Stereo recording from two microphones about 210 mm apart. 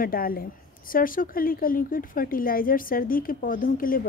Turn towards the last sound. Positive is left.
turn(degrees=40)  # may be behind; listen again after turning